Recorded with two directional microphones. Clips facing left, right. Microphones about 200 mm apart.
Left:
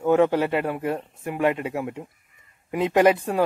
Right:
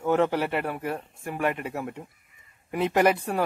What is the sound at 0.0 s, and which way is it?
Speech, 15° left (ahead or behind).